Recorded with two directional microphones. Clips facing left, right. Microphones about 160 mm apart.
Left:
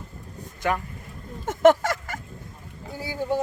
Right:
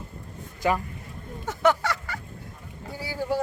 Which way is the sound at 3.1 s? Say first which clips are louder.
Left 1 dB; 20° left (ahead or behind).